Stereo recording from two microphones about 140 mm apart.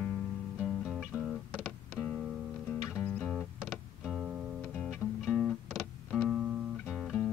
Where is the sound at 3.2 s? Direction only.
Centre (ahead or behind).